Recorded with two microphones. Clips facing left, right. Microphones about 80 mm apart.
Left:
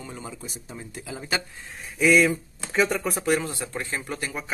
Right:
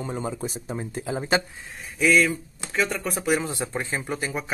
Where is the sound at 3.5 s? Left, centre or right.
Centre.